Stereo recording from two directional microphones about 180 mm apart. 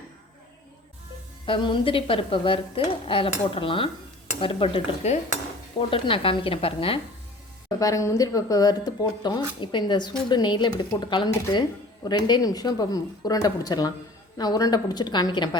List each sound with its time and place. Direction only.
1.5 s a woman's voice: 25° left (ahead or behind)
7.7 s speech: 20° left (ahead or behind)